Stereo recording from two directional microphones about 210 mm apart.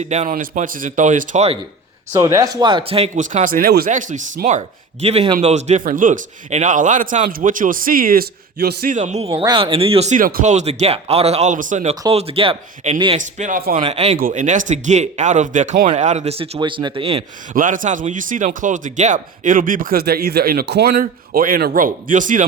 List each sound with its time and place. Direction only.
0.0 s speech: 35° right (ahead or behind)
2.1 s speech: 15° right (ahead or behind)
13.1 s speech: 40° right (ahead or behind)
13.7 s speech: 30° right (ahead or behind)
17.5 s speech: 40° right (ahead or behind)